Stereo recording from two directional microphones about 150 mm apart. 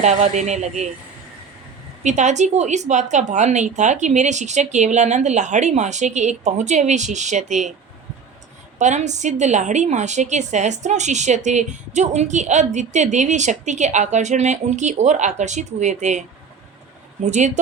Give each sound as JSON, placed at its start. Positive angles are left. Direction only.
{"t": 0.0, "sound": "a woman's voice", "side_deg": -50}
{"t": 2.0, "sound": "a woman's voice", "side_deg": -50}
{"t": 8.8, "sound": "a woman's voice", "side_deg": -50}
{"t": 17.3, "sound": "a woman's voice", "side_deg": -50}